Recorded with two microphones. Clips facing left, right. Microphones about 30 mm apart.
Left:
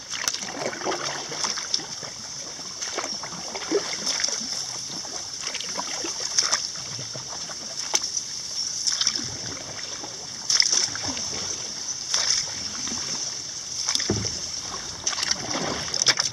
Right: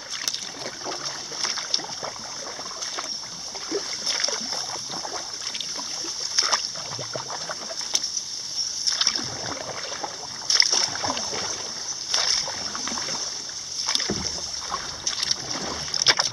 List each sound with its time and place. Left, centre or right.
0.8 s boat: left
1.4 s boat: right
4.0 s a sound: right
6.3 s boat: right
8.8 s rowboat: right
10.0 s boat: right
15.5 s boat: centre
16.0 s boat: right